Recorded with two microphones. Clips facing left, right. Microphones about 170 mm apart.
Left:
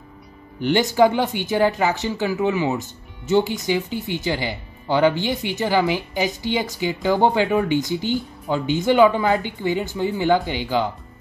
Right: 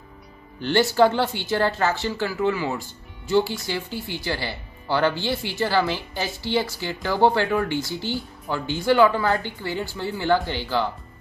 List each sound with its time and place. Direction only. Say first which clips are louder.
0.6 s speech: left 2 dB; 15° left (ahead or behind)